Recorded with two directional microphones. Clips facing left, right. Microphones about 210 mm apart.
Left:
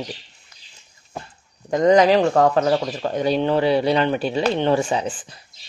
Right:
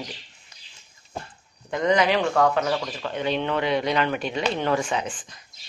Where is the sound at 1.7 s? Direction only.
40° left (ahead or behind).